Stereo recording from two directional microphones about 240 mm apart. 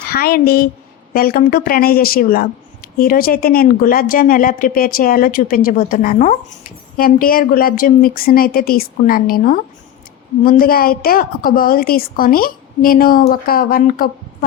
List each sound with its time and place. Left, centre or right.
0.1 s a woman's voice: left